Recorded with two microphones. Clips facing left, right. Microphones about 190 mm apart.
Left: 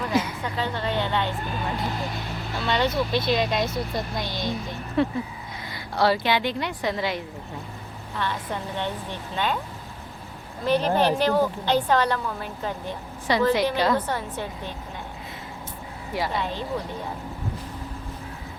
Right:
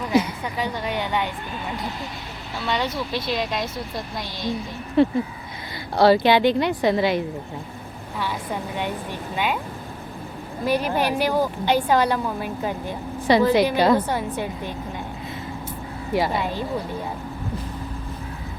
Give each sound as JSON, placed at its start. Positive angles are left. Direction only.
{"t": 0.1, "sound": "a sound", "side_deg": -15}
{"t": 2.6, "sound": "speech", "side_deg": -5}
{"t": 5.9, "sound": "a woman's voice", "side_deg": -35}
{"t": 8.2, "sound": "a woman's voice", "side_deg": -10}
{"t": 10.7, "sound": "a woman's voice", "side_deg": -10}
{"t": 16.1, "sound": "a woman's voice", "side_deg": -10}